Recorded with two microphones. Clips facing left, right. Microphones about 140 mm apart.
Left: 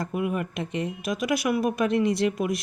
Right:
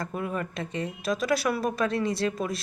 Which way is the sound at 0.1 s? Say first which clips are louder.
Left 4 dB; 10° left (ahead or behind).